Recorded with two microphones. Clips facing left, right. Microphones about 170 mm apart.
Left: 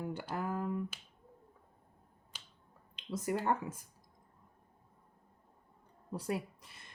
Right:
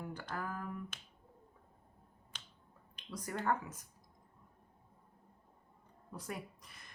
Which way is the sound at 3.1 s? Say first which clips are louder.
Left 3 dB; 25° left (ahead or behind).